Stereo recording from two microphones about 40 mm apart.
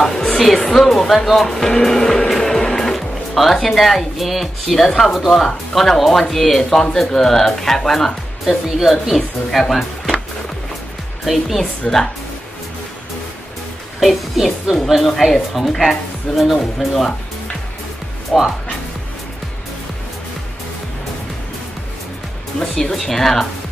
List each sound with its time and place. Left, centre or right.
0.0 s music: centre
0.7 s speech: centre
1.5 s music: centre
3.6 s speech: centre
8.6 s speech: centre
11.2 s speech: centre
13.9 s speech: centre
18.3 s speech: centre
22.9 s speech: centre